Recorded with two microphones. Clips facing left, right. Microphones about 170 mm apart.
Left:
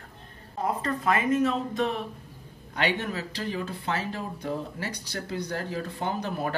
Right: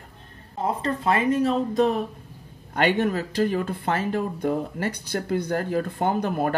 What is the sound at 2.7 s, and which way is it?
Speech, 50° right (ahead or behind).